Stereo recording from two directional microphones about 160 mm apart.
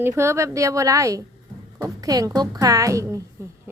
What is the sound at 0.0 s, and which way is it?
Speech, 15° right (ahead or behind).